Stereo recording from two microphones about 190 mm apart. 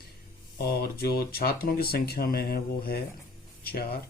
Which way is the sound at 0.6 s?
55° left (ahead or behind).